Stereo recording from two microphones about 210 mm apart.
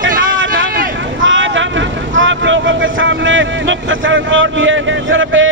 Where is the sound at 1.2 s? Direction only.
65° right (ahead or behind).